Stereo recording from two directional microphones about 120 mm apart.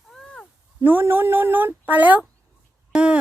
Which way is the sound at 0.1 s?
5° left (ahead or behind).